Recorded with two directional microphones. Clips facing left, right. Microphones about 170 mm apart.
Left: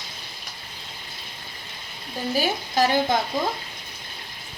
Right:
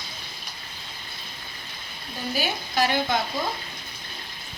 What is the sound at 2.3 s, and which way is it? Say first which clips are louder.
Speech: left 3 dB; 45° left (ahead or behind).